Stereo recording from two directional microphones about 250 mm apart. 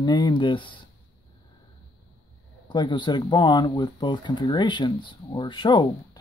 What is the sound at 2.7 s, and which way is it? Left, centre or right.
Speech, centre.